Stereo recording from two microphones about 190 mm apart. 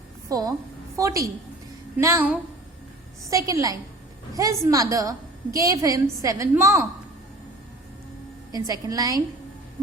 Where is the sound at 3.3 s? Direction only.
15° right (ahead or behind).